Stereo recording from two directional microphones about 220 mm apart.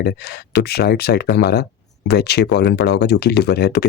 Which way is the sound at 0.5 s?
45° left (ahead or behind).